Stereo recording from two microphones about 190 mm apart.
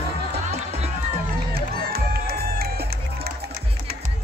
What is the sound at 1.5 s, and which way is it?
Music, 55° right (ahead or behind).